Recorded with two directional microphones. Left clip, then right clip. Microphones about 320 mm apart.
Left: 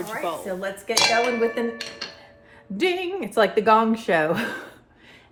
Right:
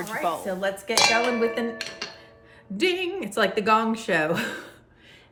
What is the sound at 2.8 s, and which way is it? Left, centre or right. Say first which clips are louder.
A woman's voice: left 1 dB; centre.